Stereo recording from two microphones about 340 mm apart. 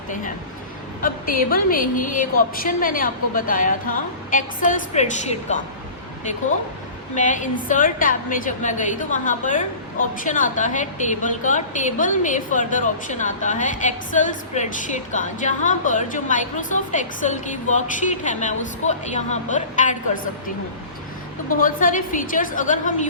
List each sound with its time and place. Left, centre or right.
1.0 s a woman's voice: left
7.2 s a woman's voice: left
21.5 s a woman's voice: left